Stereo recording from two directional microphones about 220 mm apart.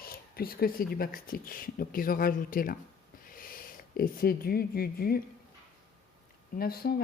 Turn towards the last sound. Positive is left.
turn(degrees=45)  # may be behind; listen again after turning